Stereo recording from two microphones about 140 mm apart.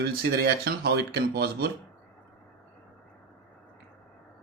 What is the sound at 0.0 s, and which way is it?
Speech, 90° right.